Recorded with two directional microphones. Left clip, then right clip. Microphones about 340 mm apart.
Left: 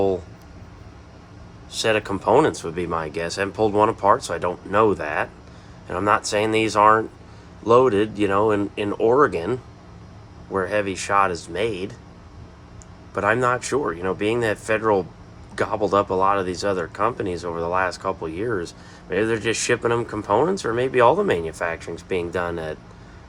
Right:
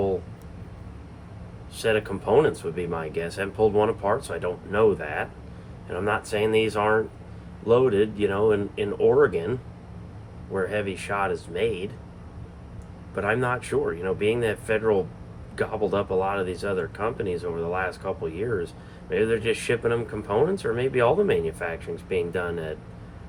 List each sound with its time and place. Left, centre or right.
1.7 s speech: left
13.1 s speech: left